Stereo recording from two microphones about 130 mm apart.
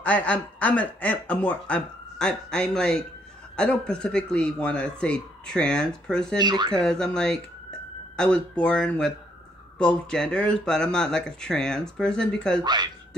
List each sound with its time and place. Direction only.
0.0 s speech: 10° left (ahead or behind)
6.3 s speech: 35° right (ahead or behind)
6.7 s speech: 5° left (ahead or behind)
12.6 s speech: 35° right (ahead or behind)